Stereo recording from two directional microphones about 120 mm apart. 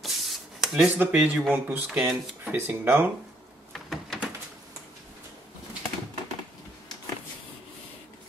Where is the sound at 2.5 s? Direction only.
20° right (ahead or behind).